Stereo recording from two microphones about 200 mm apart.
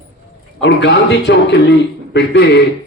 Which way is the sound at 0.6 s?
60° left (ahead or behind).